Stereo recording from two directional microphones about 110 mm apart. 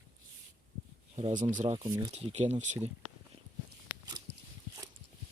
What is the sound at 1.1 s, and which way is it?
Speech, 50° right (ahead or behind).